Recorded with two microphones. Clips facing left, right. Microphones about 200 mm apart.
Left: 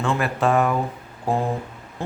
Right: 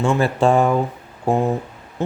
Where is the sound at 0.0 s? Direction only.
30° right (ahead or behind).